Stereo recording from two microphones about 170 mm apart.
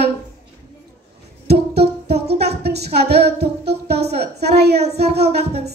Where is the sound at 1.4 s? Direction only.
75° right (ahead or behind).